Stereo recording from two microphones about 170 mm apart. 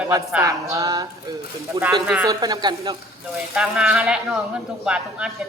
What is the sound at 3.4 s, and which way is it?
Speech, 5° right (ahead or behind).